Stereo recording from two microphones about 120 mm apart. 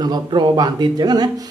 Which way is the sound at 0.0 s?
40° right (ahead or behind).